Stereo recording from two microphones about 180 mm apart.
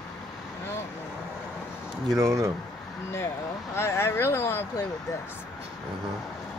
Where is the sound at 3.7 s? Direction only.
15° left (ahead or behind).